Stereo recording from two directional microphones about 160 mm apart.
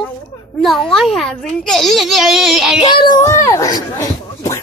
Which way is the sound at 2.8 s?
30° left (ahead or behind).